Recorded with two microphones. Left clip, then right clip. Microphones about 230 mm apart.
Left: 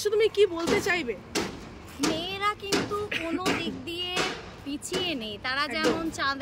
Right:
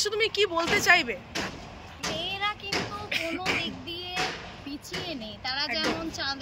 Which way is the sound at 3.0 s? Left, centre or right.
Centre.